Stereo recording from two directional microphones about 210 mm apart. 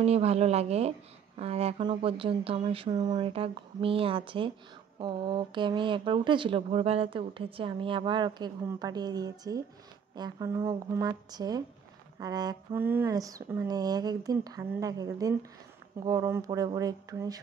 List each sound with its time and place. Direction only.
0.0 s speech: 30° right (ahead or behind)